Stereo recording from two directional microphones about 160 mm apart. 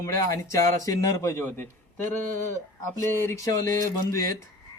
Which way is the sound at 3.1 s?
15° left (ahead or behind).